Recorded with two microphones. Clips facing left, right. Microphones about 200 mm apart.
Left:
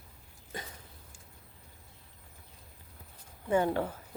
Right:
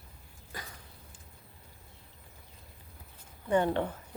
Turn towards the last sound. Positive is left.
turn(degrees=5)  # may be behind; listen again after turning